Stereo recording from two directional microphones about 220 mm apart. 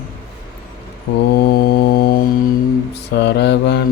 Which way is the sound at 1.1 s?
55° left (ahead or behind).